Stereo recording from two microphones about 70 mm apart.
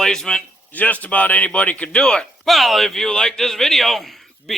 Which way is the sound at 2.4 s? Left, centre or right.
Centre.